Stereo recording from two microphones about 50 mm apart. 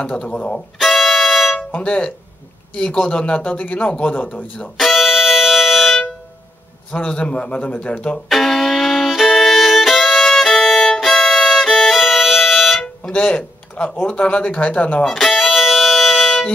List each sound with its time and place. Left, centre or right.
0.2 s a man's voice: left
0.7 s music: centre
1.8 s a man's voice: left
3.4 s speech: left
4.7 s music: centre
6.9 s a man's voice: left
8.3 s violin: centre
13.1 s a man's voice: left
15.0 s music: centre